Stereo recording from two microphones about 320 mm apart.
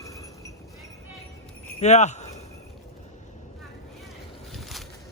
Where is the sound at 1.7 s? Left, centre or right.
Left.